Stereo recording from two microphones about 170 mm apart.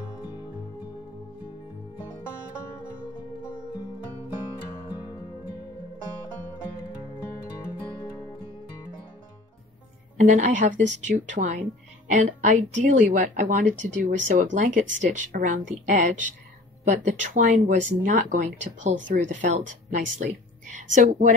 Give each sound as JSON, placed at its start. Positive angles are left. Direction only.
{"t": 10.1, "sound": "speech", "side_deg": -50}